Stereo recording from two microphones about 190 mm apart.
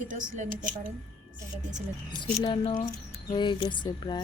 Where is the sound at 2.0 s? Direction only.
25° left (ahead or behind).